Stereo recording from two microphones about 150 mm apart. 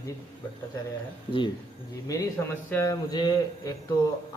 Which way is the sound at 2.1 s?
20° left (ahead or behind).